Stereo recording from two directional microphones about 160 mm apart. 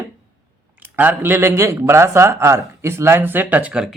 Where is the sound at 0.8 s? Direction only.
10° right (ahead or behind).